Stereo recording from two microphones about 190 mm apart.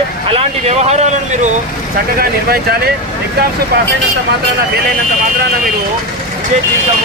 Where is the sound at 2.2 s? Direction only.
55° right (ahead or behind).